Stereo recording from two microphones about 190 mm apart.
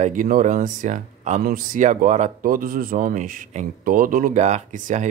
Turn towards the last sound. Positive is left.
turn(degrees=-40)  # may be behind; listen again after turning